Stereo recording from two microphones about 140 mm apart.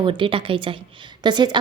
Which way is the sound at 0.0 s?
35° right (ahead or behind).